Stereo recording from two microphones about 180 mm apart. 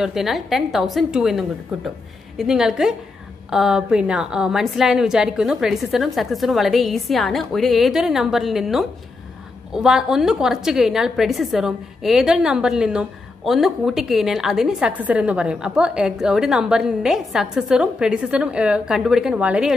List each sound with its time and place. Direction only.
0.0 s a woman's voice: centre (ahead or behind)